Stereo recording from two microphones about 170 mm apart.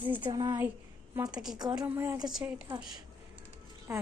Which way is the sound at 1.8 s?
15° right (ahead or behind).